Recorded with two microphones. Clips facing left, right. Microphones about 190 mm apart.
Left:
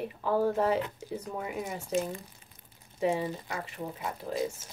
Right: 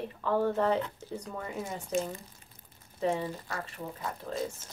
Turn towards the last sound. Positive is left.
turn(degrees=15)  # may be behind; listen again after turning